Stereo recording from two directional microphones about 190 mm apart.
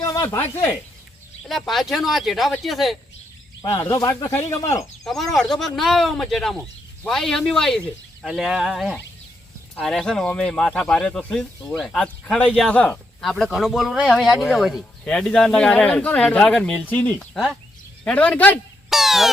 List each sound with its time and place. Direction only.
0.0 s a sound: 15° left (ahead or behind)
1.5 s speech: centre (ahead or behind)
3.6 s speech: 15° left (ahead or behind)
5.0 s speech: centre (ahead or behind)